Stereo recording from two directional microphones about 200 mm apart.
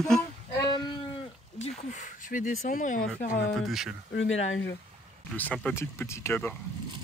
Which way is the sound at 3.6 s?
Centre (ahead or behind).